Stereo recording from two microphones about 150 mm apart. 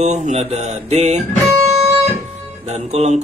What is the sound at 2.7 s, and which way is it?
Mantra, 45° right (ahead or behind).